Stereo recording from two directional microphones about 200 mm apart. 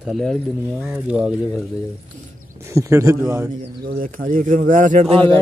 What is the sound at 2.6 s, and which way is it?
Speech, 15° right (ahead or behind).